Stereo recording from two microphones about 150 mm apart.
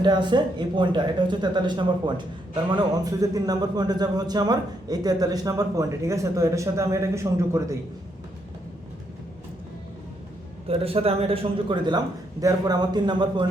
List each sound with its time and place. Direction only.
0.0 s a man's voice: 30° right (ahead or behind)
10.7 s a man's voice: 40° right (ahead or behind)